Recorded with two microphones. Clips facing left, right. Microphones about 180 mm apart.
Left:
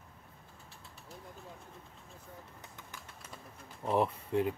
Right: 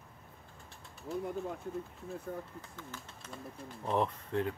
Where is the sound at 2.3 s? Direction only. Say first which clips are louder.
Right 11 dB; 65° right (ahead or behind).